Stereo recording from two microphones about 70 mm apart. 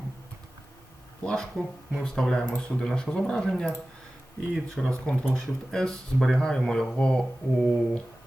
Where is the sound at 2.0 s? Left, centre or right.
Centre.